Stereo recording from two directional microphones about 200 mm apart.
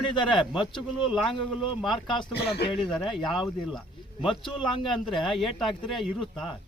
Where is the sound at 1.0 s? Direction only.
Centre (ahead or behind).